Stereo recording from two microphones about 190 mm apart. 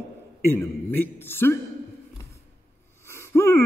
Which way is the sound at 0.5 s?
10° left (ahead or behind).